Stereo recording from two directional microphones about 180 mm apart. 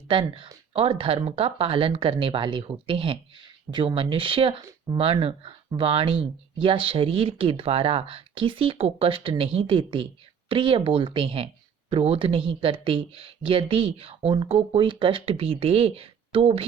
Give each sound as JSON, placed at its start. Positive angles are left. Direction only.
{"t": 0.1, "sound": "speech", "side_deg": -30}